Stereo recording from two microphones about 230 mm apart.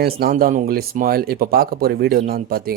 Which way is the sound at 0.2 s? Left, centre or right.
Right.